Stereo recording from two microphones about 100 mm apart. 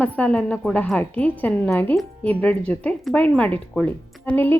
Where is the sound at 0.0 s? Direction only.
15° left (ahead or behind).